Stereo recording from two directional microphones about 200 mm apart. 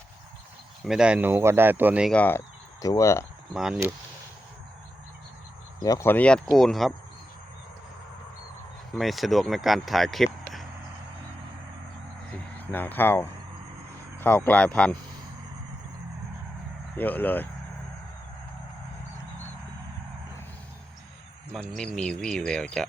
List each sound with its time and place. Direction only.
0.9 s speech: 5° right (ahead or behind)
2.1 s speech: 10° left (ahead or behind)
3.5 s speech: centre (ahead or behind)
5.8 s speech: 15° left (ahead or behind)
9.0 s speech: centre (ahead or behind)
12.5 s speech: 10° left (ahead or behind)
17.0 s speech: 10° left (ahead or behind)
21.5 s speech: 5° left (ahead or behind)